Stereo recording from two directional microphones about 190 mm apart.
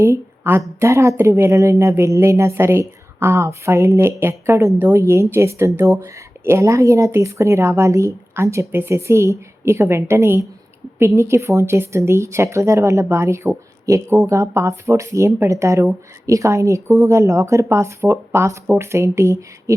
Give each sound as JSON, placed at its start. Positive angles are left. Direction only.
{"t": 0.0, "sound": "a woman's voice", "side_deg": -15}